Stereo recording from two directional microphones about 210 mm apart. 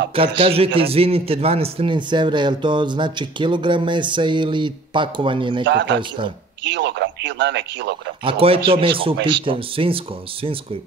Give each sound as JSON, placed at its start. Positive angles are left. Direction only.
{"t": 0.4, "sound": "a man's voice", "side_deg": -25}
{"t": 5.7, "sound": "speech", "side_deg": -60}
{"t": 5.9, "sound": "a man's voice", "side_deg": -25}
{"t": 6.6, "sound": "speech", "side_deg": -55}
{"t": 8.2, "sound": "a man's voice", "side_deg": -25}